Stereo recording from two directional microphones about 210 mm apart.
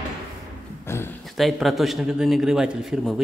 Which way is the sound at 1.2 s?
Centre (ahead or behind).